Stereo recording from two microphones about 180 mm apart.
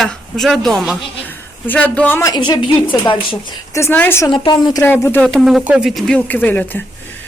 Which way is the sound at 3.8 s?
10° left (ahead or behind).